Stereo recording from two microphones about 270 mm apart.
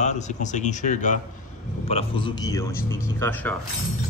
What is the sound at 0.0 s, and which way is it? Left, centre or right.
A man's voice, left.